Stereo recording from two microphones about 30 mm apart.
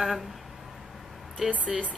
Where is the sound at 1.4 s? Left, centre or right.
Right.